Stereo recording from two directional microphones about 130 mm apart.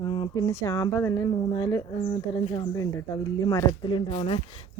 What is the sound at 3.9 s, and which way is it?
Speech, 45° left (ahead or behind).